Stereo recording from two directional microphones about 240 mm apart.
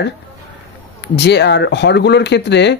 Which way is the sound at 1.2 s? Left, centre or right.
Left.